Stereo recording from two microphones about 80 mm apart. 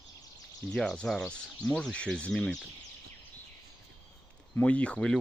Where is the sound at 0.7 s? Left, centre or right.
Centre.